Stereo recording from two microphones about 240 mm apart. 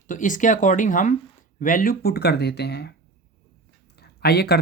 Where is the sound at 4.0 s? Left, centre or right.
Left.